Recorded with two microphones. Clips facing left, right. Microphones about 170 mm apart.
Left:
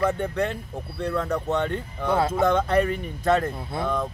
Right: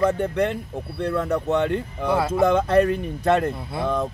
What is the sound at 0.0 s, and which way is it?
Speech, 20° right (ahead or behind).